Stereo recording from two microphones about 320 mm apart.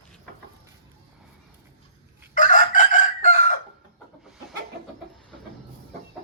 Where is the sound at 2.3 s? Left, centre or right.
Left.